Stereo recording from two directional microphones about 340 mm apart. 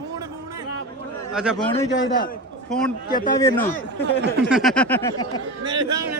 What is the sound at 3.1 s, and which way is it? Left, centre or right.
Speech, left.